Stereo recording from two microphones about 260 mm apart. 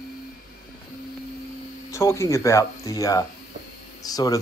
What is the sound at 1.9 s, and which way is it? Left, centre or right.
A man's voice, centre.